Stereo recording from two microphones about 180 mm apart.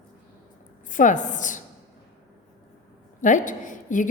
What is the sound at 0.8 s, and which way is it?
Speech, 45° left (ahead or behind).